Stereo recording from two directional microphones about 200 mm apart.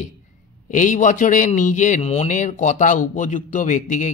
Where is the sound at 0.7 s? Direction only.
40° left (ahead or behind).